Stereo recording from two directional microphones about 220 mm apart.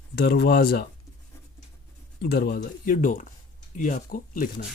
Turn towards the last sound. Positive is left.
turn(degrees=40)  # may be behind; listen again after turning